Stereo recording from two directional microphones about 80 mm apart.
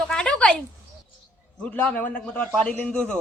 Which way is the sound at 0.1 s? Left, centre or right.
Centre.